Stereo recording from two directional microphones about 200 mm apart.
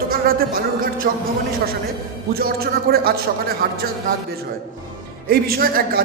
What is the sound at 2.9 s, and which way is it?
Speech, 50° right (ahead or behind).